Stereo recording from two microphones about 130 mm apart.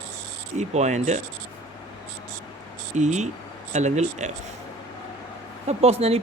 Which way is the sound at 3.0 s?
65° right (ahead or behind).